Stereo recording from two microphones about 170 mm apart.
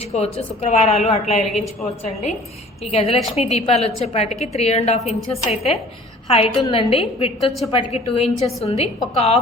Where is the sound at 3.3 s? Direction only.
40° left (ahead or behind).